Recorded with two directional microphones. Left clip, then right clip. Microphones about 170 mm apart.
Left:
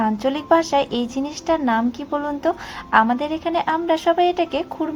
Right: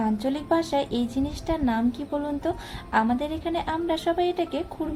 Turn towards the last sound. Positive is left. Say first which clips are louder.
# left 7 dB
turn(degrees=10)  # may be behind; listen again after turning